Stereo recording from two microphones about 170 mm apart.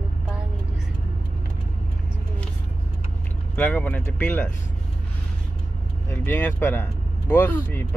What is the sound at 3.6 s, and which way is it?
Speech, 10° left (ahead or behind).